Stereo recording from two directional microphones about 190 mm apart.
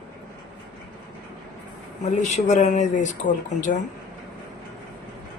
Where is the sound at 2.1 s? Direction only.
40° left (ahead or behind).